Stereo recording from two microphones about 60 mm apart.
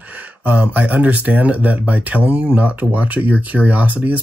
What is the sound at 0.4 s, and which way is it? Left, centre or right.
Speech, right.